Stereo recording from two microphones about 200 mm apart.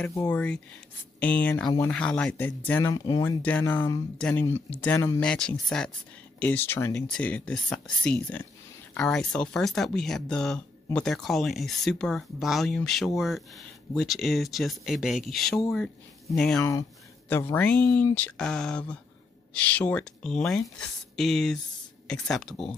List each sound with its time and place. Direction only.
0.0 s speech: 10° left (ahead or behind)
16.5 s speech: 15° left (ahead or behind)